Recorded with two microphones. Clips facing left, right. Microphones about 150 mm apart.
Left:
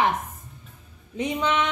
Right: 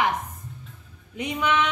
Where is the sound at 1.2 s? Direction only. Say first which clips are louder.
Even; 25° left (ahead or behind).